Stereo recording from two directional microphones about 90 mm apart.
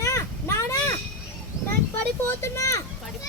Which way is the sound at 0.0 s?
30° left (ahead or behind).